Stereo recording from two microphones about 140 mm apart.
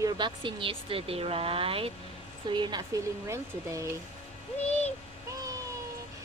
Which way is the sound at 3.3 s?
20° right (ahead or behind).